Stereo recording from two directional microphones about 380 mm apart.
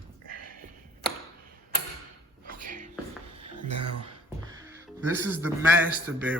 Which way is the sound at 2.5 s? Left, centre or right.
Right.